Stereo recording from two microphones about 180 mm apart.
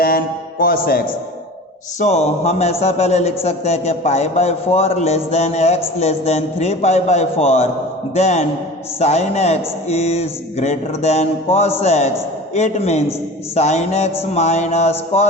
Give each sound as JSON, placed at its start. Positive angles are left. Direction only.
{"t": 0.6, "sound": "a man's voice", "side_deg": 55}
{"t": 2.0, "sound": "a man's voice", "side_deg": 40}